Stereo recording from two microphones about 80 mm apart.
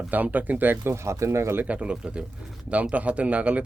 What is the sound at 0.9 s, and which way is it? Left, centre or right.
Speech, right.